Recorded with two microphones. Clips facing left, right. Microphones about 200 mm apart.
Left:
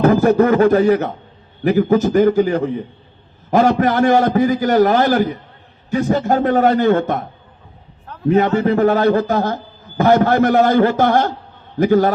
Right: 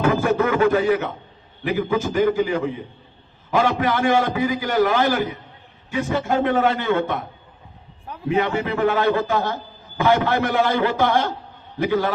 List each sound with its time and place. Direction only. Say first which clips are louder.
0.0 s a man's voice: left 7 dB; 40° left (ahead or behind)
8.3 s a man's voice: left 7 dB; 40° left (ahead or behind)